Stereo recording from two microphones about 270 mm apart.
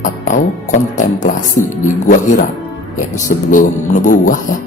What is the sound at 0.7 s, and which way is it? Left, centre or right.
Speech, left.